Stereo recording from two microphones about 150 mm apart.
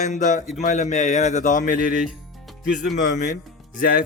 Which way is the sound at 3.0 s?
55° left (ahead or behind).